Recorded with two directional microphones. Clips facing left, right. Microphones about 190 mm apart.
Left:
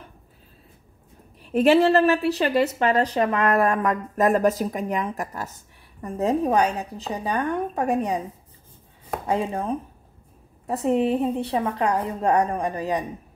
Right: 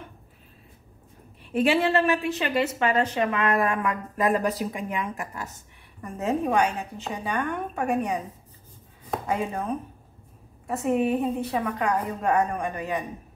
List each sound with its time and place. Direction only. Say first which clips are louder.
1.4 s a woman's voice: left 5 dB; 40° left (ahead or behind)
9.3 s a woman's voice: left 4 dB; 30° left (ahead or behind)